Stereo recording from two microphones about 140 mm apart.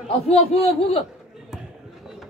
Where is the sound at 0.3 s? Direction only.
45° left (ahead or behind).